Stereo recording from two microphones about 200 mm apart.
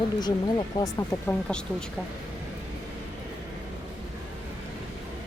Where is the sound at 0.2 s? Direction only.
20° left (ahead or behind).